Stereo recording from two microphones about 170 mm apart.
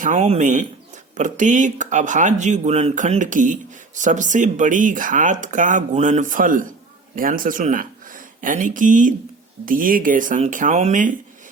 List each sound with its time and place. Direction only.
0.0 s speech: 45° right (ahead or behind)